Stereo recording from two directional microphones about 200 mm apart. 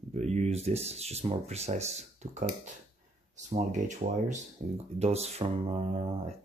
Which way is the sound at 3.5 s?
35° right (ahead or behind).